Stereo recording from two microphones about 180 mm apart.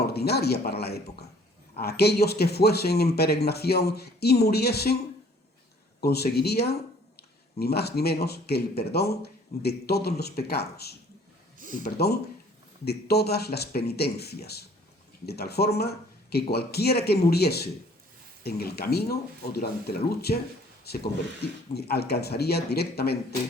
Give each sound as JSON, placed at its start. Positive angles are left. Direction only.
{"t": 0.0, "sound": "a man's voice", "side_deg": 60}
{"t": 6.0, "sound": "a man's voice", "side_deg": 60}